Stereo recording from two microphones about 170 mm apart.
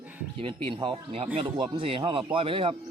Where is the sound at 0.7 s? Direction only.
30° right (ahead or behind).